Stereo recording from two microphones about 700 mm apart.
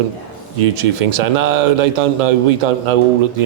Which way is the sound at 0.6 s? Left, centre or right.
Right.